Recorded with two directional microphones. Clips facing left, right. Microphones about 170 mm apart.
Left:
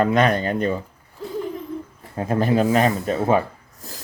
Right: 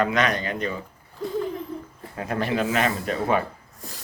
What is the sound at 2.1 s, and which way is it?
Speech, 30° left (ahead or behind).